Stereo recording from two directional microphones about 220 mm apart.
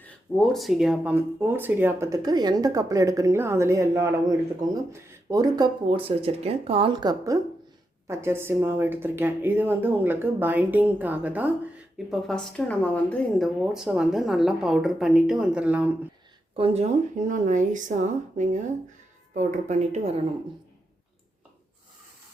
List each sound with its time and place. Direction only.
0.0 s speech: 5° left (ahead or behind)
16.6 s speech: 25° right (ahead or behind)